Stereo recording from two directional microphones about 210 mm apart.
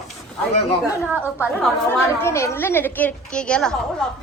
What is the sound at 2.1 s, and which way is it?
A woman's voice, 10° left (ahead or behind).